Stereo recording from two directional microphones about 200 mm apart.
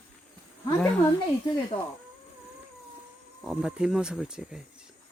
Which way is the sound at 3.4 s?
5° right (ahead or behind).